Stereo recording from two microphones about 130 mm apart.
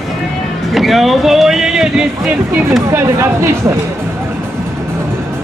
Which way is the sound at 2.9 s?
20° right (ahead or behind).